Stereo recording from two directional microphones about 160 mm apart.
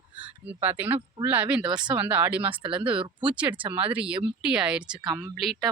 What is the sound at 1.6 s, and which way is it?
Speech, 30° right (ahead or behind).